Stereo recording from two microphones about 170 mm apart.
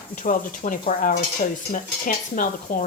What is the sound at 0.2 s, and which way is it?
Speech, 50° left (ahead or behind).